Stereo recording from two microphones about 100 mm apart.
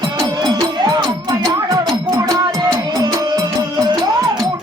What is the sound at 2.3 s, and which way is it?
Music, 35° right (ahead or behind).